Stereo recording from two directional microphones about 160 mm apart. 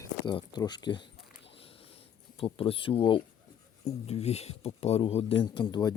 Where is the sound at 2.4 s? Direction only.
35° left (ahead or behind).